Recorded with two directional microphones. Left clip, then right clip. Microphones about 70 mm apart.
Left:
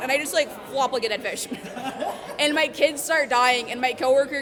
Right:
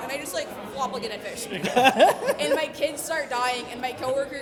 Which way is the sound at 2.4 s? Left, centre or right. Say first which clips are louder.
Left 4 dB; left.